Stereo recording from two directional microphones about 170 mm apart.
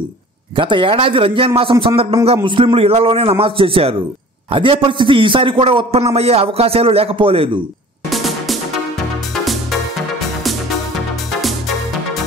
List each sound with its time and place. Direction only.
0.6 s a man's voice: 30° right (ahead or behind)
8.1 s music: centre (ahead or behind)